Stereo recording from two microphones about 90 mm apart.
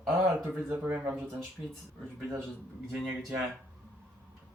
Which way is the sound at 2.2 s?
30° right (ahead or behind).